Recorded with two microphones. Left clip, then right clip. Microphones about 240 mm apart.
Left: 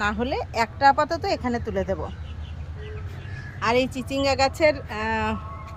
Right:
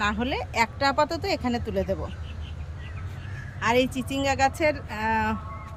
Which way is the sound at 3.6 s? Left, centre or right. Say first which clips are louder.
Left 1 dB; centre.